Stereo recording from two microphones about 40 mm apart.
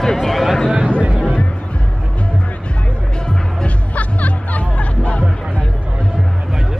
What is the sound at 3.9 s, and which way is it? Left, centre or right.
Music, left.